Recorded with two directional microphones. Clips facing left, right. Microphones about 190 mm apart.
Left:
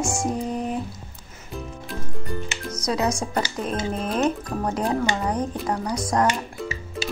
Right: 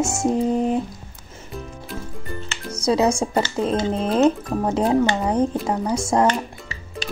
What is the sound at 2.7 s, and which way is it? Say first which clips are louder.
Speech: right 6 dB; 30° right (ahead or behind).